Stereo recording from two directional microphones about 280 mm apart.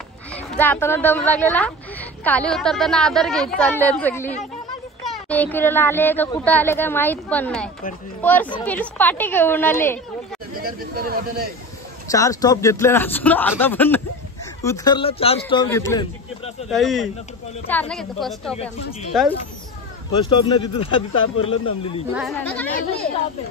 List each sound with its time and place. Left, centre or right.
0.3 s a woman's voice: centre
10.5 s speech: right
12.1 s speech: centre
16.7 s a woman's voice: centre
20.2 s speech: centre
22.1 s a woman's voice: centre